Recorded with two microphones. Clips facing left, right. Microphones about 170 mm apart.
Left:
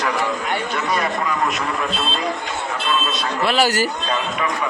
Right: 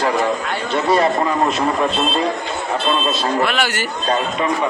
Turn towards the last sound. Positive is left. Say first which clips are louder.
# left 2 dB
turn(degrees=35)  # may be behind; listen again after turning